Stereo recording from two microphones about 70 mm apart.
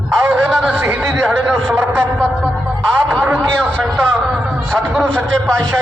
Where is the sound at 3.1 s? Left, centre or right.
Right.